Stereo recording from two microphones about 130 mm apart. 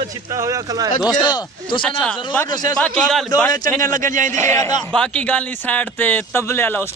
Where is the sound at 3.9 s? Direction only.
90° right.